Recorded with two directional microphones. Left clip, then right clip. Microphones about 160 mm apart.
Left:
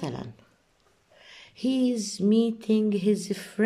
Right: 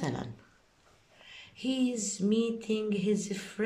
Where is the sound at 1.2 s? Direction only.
35° left (ahead or behind).